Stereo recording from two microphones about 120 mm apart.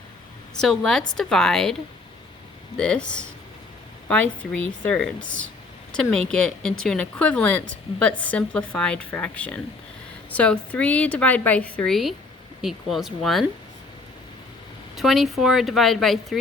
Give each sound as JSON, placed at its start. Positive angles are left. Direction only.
{"t": 0.5, "sound": "a woman's voice", "side_deg": 5}
{"t": 2.7, "sound": "a woman's voice", "side_deg": 10}
{"t": 14.9, "sound": "a woman's voice", "side_deg": 0}